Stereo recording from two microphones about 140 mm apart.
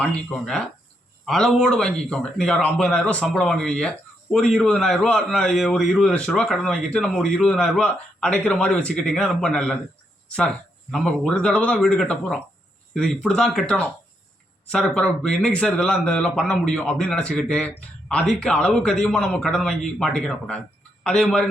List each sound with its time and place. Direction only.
0.0 s a man's voice: 5° left (ahead or behind)
10.9 s a man's voice: 5° left (ahead or behind)